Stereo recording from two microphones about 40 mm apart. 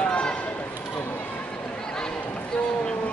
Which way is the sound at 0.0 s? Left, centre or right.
Left.